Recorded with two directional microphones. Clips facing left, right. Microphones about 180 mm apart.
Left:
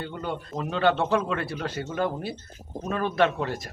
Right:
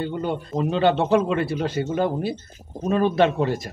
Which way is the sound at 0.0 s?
25° right (ahead or behind).